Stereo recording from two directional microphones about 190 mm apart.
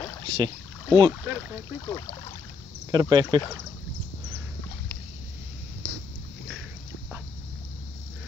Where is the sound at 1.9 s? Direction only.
20° left (ahead or behind).